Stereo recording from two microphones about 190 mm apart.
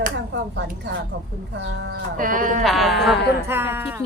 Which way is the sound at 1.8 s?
45° right (ahead or behind).